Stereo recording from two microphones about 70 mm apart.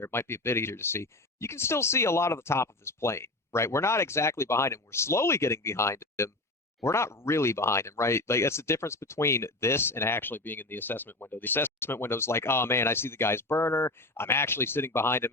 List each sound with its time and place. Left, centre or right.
0.0 s speech: left